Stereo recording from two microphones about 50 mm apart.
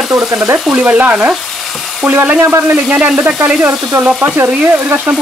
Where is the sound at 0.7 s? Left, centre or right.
Right.